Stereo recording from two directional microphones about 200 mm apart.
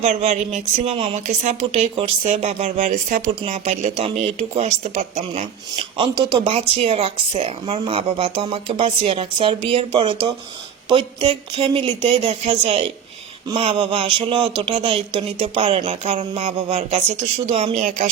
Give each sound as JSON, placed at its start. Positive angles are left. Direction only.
{"t": 0.0, "sound": "speech", "side_deg": -35}
{"t": 5.7, "sound": "speech", "side_deg": -25}